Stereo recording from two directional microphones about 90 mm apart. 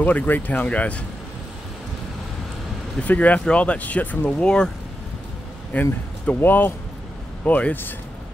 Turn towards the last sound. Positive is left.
turn(degrees=20)  # may be behind; listen again after turning